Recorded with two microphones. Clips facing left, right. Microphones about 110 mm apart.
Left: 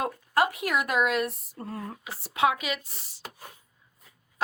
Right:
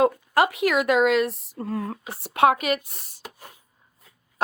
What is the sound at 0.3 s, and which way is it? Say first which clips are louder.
Speech: right 3 dB; 90° right.